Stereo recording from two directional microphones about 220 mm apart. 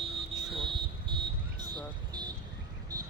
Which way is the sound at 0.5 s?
25° right (ahead or behind).